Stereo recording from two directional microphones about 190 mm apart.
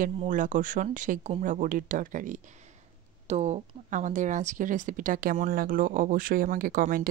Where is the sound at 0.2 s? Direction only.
40° right (ahead or behind).